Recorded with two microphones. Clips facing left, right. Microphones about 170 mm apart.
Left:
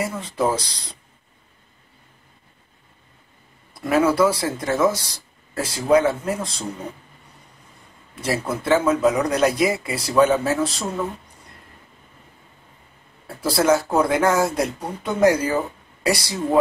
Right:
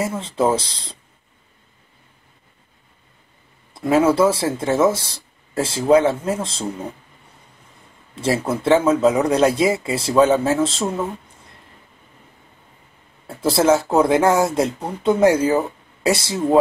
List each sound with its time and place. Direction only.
0.0 s speech: 25° right (ahead or behind)
3.7 s speech: 25° right (ahead or behind)
8.2 s speech: 25° right (ahead or behind)
13.4 s speech: 25° right (ahead or behind)